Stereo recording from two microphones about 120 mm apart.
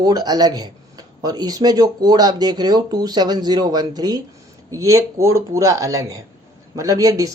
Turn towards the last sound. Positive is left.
turn(degrees=-30)  # may be behind; listen again after turning